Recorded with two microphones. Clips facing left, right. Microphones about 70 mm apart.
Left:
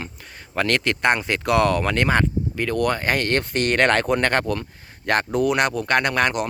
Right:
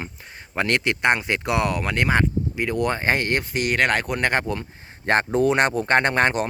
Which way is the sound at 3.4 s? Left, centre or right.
Centre.